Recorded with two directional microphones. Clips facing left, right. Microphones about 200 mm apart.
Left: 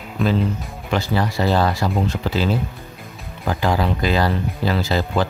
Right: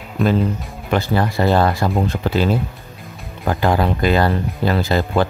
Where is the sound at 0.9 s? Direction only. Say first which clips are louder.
Right 3 dB; 55° right (ahead or behind).